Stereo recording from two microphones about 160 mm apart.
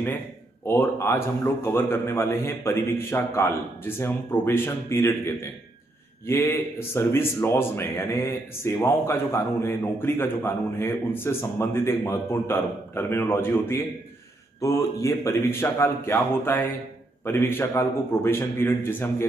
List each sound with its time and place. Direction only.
0.7 s speech: 15° left (ahead or behind)